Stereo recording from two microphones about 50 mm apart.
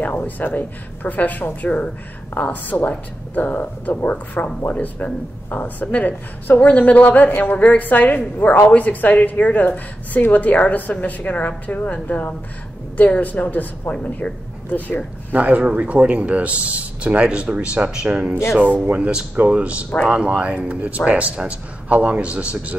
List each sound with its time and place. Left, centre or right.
0.0 s a woman's voice: left
15.3 s speech: right